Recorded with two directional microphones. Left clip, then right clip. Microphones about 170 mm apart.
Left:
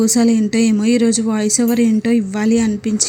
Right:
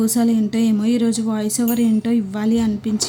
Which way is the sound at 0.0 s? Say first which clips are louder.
Left 4 dB; 20° left (ahead or behind).